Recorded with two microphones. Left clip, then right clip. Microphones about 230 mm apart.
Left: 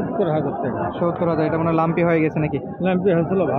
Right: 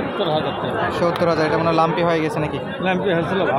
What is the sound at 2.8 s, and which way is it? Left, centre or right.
Speech, left.